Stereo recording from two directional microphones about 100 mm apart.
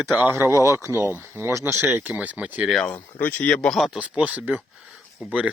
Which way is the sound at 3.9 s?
15° right (ahead or behind).